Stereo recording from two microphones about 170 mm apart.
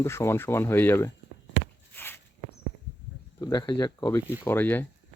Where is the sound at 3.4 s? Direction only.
25° left (ahead or behind).